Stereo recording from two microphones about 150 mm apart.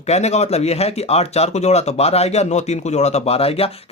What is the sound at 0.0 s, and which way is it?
Speech, 45° left (ahead or behind).